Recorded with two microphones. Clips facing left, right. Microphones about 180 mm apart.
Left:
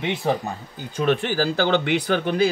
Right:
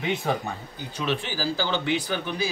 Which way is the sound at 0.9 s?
55° left (ahead or behind).